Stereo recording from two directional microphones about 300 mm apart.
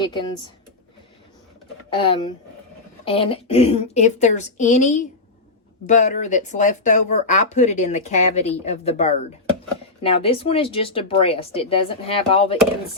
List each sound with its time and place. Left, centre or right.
0.0 s speech: centre
1.9 s speech: centre